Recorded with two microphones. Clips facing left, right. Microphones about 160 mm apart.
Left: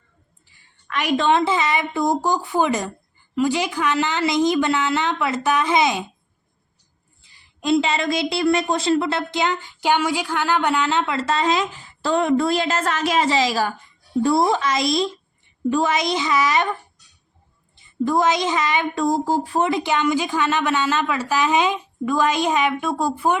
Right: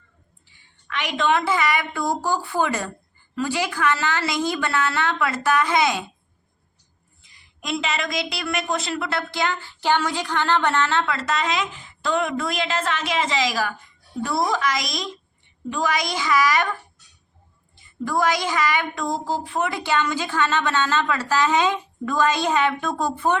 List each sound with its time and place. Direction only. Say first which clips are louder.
0.9 s speech: left 3 dB; 40° left (ahead or behind); by 6.1 s 20° left (ahead or behind)
7.2 s speech: left 7 dB; 30° left (ahead or behind)
18.0 s speech: left 3 dB; 20° left (ahead or behind)
19.0 s speech: left 6 dB; 45° left (ahead or behind)
19.5 s a woman's voice: left 1 dB; 20° left (ahead or behind)